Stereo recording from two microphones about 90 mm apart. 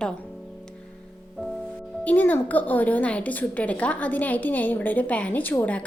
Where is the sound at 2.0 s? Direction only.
15° left (ahead or behind).